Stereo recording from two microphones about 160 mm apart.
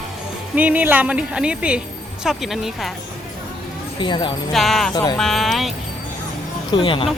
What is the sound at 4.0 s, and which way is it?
Speech, 30° left (ahead or behind).